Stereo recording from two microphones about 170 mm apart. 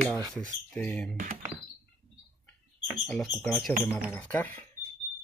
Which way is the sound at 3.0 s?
Centre (ahead or behind).